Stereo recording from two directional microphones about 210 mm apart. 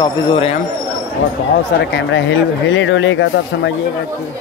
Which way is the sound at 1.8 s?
55° left (ahead or behind).